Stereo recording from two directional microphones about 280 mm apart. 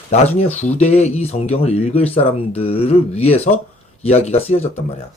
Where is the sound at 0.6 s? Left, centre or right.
Left.